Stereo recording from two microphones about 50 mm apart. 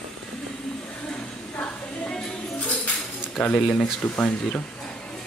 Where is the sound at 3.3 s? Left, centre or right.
Centre.